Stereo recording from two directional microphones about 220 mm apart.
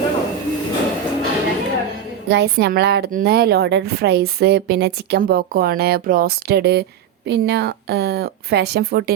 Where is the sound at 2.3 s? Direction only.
50° right (ahead or behind).